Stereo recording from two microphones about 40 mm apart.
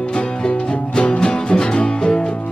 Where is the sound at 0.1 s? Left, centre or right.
Left.